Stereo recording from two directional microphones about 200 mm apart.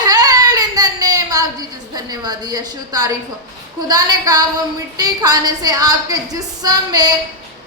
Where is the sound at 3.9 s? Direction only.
20° right (ahead or behind).